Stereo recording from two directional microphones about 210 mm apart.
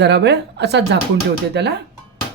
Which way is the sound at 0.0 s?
55° right (ahead or behind).